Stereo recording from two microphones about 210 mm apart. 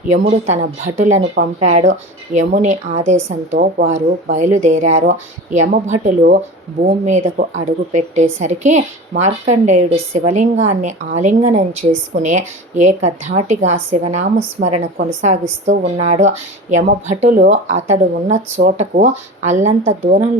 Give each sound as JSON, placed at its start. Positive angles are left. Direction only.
{"t": 0.1, "sound": "speech", "side_deg": -30}